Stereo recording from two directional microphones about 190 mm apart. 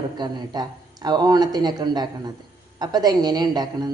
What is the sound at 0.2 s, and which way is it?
Speech, 20° right (ahead or behind).